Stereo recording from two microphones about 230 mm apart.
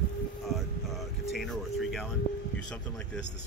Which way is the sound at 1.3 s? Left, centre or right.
Centre.